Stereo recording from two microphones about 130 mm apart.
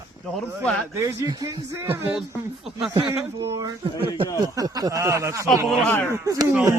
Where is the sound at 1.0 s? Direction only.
30° right (ahead or behind).